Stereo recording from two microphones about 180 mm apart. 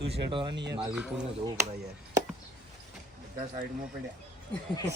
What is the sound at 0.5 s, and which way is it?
Speech, 70° right (ahead or behind).